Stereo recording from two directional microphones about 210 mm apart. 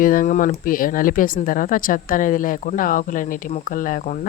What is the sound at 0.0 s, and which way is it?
Speech, 40° left (ahead or behind).